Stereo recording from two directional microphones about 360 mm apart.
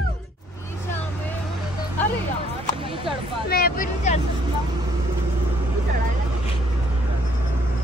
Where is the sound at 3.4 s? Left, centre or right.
Left.